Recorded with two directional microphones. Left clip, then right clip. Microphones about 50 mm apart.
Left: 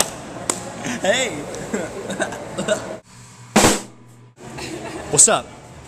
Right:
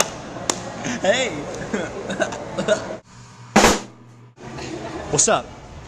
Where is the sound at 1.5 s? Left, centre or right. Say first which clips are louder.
Even; left.